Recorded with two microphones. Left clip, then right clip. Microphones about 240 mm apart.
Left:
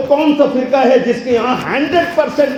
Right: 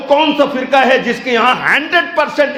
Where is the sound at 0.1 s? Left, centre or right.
Right.